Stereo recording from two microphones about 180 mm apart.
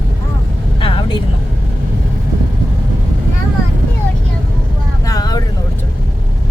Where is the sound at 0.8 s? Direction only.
30° left (ahead or behind).